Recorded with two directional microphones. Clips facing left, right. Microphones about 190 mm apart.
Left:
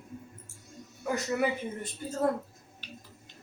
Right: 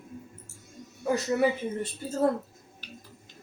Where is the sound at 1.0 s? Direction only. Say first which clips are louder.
Right 4 dB; 30° right (ahead or behind).